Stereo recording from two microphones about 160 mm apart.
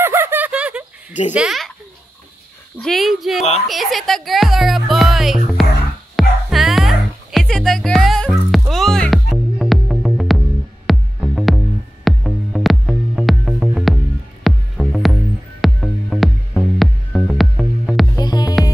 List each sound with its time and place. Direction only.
0.0 s a sound: 15° right (ahead or behind)
1.3 s speech: 5° right (ahead or behind)
2.8 s speech: centre (ahead or behind)
6.1 s music: centre (ahead or behind)
18.2 s music: 25° left (ahead or behind)